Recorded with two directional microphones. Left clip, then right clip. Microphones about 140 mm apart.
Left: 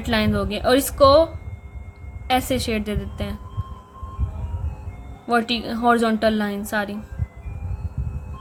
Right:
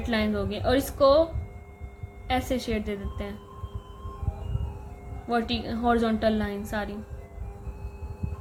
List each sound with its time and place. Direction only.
0.1 s a woman's voice: 45° left (ahead or behind)
5.3 s a woman's voice: 45° left (ahead or behind)